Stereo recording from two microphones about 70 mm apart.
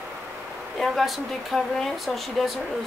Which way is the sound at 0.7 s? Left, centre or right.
Centre.